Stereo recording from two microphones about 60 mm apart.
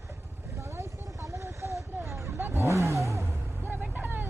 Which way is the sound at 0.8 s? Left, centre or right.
Right.